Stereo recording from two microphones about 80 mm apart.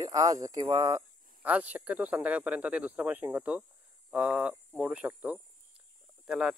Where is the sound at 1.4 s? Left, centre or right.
Centre.